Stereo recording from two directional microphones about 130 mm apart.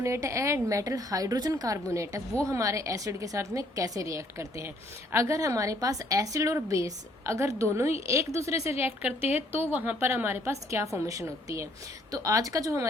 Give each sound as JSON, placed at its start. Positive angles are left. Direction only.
{"t": 0.0, "sound": "a woman's voice", "side_deg": -25}